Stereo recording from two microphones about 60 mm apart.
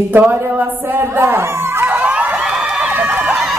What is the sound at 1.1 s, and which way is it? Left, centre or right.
Speech, right.